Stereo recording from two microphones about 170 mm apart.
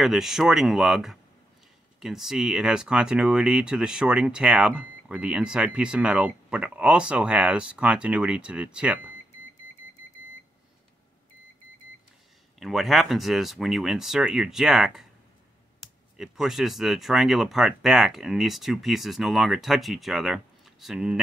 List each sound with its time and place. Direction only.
0.0 s speech: centre (ahead or behind)
12.5 s speech: centre (ahead or behind)
16.2 s speech: centre (ahead or behind)